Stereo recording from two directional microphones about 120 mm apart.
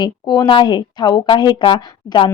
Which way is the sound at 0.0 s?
40° left (ahead or behind).